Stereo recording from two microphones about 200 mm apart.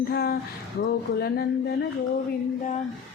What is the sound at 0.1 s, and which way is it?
Speech, 50° left (ahead or behind).